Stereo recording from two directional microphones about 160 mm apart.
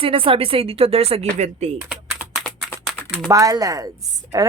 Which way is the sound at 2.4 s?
5° left (ahead or behind).